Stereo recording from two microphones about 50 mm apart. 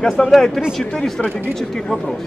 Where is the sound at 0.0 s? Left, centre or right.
Centre.